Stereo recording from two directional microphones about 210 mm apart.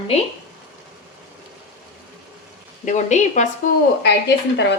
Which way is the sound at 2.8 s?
35° left (ahead or behind).